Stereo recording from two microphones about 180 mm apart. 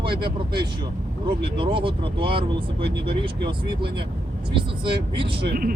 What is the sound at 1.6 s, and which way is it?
Speech, 30° right (ahead or behind).